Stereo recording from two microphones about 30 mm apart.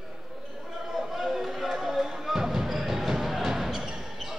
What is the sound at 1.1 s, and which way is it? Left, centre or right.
Music, centre.